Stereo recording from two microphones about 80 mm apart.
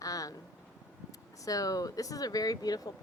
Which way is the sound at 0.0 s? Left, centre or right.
Left.